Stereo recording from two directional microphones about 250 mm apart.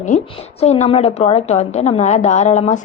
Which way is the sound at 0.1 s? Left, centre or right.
Left.